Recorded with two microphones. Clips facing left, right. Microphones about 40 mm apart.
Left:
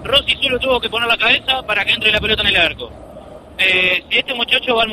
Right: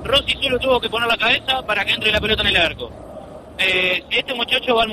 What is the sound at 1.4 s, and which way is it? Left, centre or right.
Speech, left.